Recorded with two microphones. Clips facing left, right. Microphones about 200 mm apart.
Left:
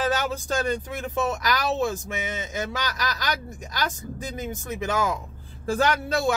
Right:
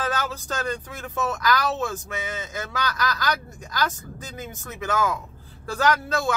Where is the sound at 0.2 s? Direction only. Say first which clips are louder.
Left 3 dB; 15° left (ahead or behind).